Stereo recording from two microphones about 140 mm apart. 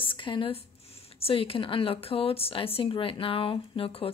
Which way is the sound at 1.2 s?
40° left (ahead or behind).